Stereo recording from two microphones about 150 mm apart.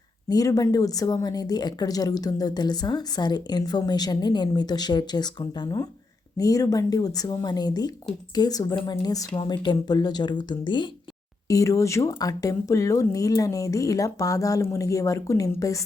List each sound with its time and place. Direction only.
0.3 s a woman's voice: 25° left (ahead or behind)
11.4 s a woman's voice: 20° left (ahead or behind)